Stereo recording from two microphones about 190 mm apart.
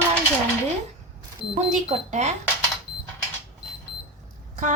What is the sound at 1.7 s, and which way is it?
Speech, 35° right (ahead or behind).